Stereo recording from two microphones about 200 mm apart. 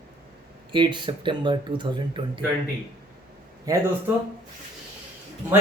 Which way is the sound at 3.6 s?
15° right (ahead or behind).